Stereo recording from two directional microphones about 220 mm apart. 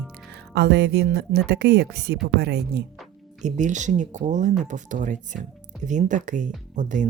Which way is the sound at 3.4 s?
35° right (ahead or behind).